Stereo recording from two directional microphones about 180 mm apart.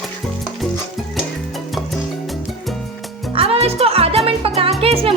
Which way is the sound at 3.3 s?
35° right (ahead or behind).